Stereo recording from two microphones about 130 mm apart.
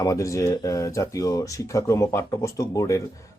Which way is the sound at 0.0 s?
25° left (ahead or behind).